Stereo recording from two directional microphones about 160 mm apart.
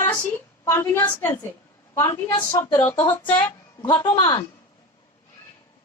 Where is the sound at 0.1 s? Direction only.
10° left (ahead or behind).